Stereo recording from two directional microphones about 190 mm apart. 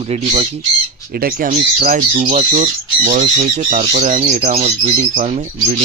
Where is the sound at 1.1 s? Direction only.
50° right (ahead or behind).